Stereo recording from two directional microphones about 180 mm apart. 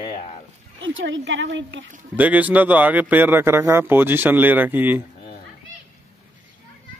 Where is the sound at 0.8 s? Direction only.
90° right.